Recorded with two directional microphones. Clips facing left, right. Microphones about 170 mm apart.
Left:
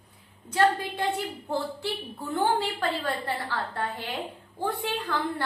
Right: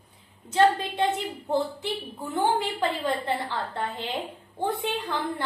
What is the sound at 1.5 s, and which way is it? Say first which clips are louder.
A woman's voice: right 4 dB; 20° right (ahead or behind).